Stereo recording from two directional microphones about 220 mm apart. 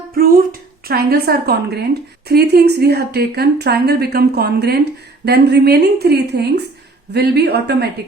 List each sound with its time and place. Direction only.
0.1 s music: 40° right (ahead or behind)
0.9 s a woman's voice: 45° right (ahead or behind)